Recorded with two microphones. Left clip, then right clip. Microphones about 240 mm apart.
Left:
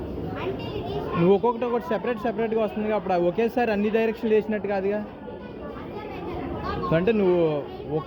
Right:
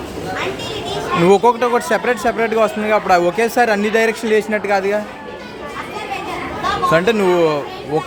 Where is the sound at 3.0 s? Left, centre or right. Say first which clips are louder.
Right 8 dB; right.